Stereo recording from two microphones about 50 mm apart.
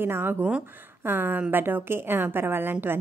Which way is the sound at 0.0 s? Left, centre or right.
Right.